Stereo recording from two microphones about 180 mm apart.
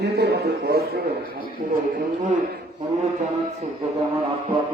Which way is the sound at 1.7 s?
50° right (ahead or behind).